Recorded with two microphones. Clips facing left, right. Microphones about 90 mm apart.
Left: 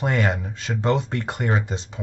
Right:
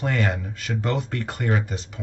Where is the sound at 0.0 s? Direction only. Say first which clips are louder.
Left 2 dB; 20° left (ahead or behind).